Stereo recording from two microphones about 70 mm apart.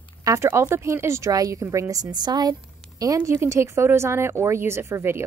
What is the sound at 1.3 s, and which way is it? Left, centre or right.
A woman's voice, right.